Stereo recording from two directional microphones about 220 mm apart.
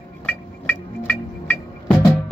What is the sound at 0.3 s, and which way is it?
Music, 5° left (ahead or behind).